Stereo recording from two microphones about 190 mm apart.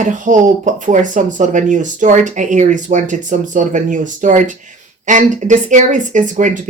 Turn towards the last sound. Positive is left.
turn(degrees=-40)  # may be behind; listen again after turning